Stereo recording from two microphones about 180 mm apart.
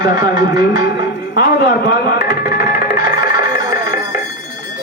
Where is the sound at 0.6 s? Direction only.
65° left (ahead or behind).